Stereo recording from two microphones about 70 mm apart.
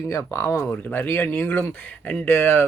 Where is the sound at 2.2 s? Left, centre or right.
Left.